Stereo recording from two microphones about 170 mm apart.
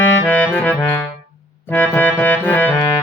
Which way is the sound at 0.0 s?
10° left (ahead or behind).